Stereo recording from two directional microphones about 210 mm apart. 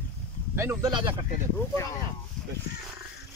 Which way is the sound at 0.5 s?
15° right (ahead or behind).